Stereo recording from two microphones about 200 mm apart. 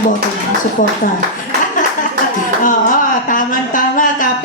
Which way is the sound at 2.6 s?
40° left (ahead or behind).